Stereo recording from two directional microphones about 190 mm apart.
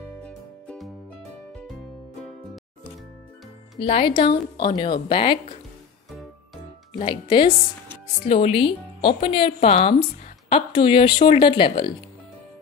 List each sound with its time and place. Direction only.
0.2 s music: 5° left (ahead or behind)
2.2 s music: 5° left (ahead or behind)
3.7 s speech: 30° left (ahead or behind)
7.0 s speech: 25° left (ahead or behind)